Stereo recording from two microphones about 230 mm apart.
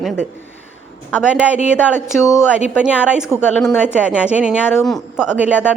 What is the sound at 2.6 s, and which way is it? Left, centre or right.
A woman's voice, centre.